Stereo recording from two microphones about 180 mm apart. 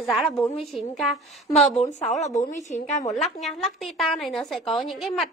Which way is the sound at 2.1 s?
40° left (ahead or behind).